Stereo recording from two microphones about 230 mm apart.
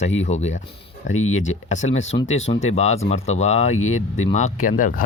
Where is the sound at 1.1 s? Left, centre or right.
Left.